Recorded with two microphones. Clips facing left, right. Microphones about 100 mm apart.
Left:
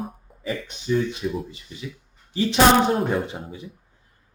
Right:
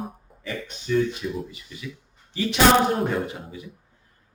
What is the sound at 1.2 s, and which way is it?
A woman's voice, 30° left (ahead or behind).